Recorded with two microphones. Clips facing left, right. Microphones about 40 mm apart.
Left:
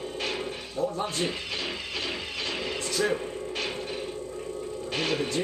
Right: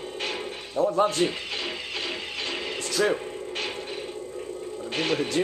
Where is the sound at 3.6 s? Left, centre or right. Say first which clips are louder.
Even; centre.